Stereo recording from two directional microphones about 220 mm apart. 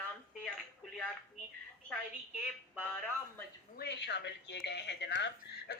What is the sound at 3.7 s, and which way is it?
Speech, 50° left (ahead or behind).